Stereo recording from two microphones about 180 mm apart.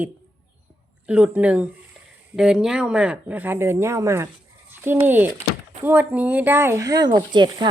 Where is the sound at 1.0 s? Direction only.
5° right (ahead or behind).